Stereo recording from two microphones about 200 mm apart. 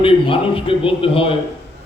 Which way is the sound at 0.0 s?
25° left (ahead or behind).